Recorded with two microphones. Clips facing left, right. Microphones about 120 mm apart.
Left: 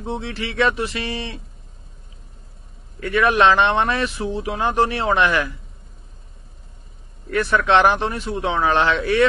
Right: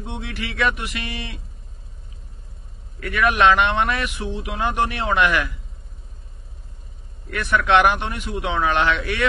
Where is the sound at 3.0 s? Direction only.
30° left (ahead or behind).